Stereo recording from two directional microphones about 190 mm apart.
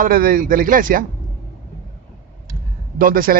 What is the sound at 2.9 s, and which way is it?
Speech, 45° right (ahead or behind).